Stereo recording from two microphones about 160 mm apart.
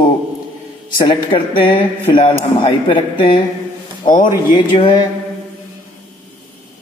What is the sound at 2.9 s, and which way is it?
Speech, 30° left (ahead or behind).